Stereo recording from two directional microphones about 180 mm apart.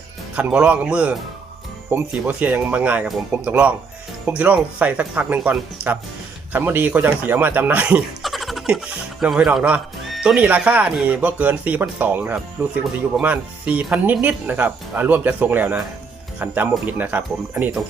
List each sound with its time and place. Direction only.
0.3 s speech: 5° right (ahead or behind)